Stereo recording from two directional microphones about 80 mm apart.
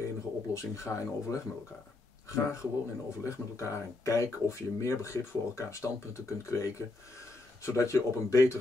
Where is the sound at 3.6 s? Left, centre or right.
Left.